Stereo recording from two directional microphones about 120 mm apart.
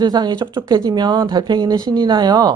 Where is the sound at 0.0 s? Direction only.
35° right (ahead or behind).